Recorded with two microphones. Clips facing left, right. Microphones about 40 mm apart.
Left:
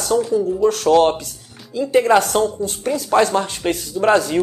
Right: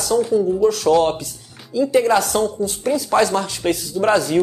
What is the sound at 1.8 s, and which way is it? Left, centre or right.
Speech, left.